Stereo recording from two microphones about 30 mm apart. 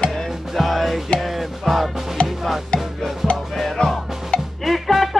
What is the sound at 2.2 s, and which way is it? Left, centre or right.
Music, left.